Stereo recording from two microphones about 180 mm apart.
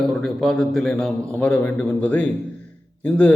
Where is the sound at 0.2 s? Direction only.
Centre (ahead or behind).